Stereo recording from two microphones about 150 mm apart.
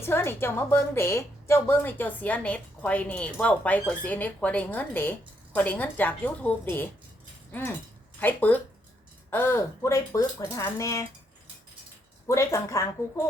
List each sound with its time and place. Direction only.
0.0 s a woman's voice: 15° left (ahead or behind)
8.2 s a woman's voice: 10° left (ahead or behind)
12.3 s speech: 20° left (ahead or behind)